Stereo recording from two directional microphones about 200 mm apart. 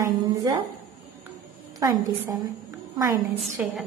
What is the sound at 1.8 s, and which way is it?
Speech, 15° right (ahead or behind).